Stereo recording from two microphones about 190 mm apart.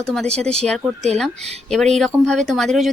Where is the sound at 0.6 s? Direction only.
5° left (ahead or behind).